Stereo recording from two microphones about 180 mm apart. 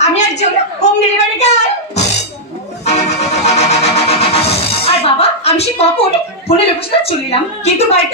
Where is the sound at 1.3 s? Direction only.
40° left (ahead or behind).